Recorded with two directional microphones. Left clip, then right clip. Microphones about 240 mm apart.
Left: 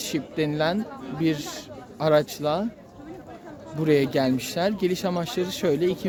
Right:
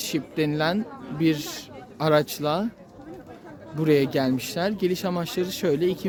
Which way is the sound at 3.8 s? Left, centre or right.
Centre.